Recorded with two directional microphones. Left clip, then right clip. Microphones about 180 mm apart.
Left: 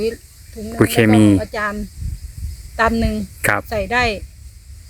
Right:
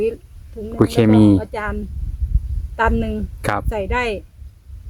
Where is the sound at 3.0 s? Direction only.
5° right (ahead or behind).